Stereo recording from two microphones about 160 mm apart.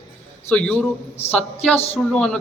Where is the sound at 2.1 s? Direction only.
5° left (ahead or behind).